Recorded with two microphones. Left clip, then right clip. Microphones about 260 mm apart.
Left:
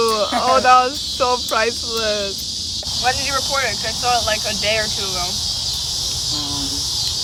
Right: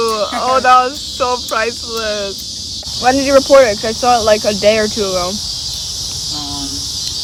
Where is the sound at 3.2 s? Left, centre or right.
Centre.